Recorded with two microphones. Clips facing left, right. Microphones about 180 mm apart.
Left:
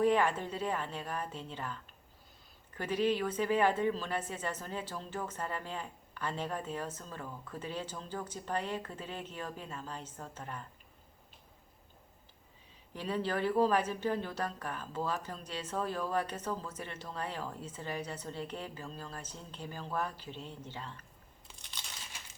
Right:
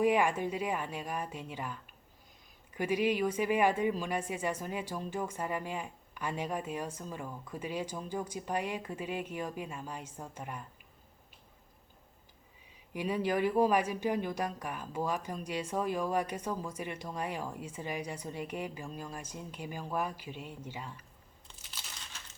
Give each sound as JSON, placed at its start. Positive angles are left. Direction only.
{"t": 0.0, "sound": "speech", "side_deg": -10}
{"t": 12.9, "sound": "speech", "side_deg": -10}
{"t": 21.4, "sound": "crunch", "side_deg": -5}